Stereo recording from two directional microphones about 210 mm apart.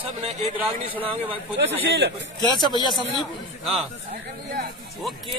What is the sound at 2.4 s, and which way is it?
Speech, 20° left (ahead or behind).